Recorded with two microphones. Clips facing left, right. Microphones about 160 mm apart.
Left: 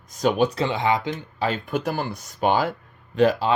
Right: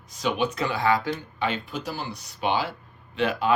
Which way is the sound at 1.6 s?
55° left (ahead or behind).